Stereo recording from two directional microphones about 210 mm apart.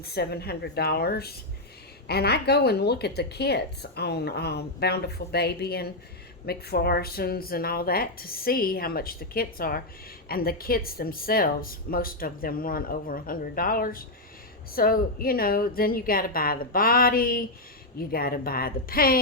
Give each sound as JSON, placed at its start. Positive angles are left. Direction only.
{"t": 0.1, "sound": "a woman's voice", "side_deg": 50}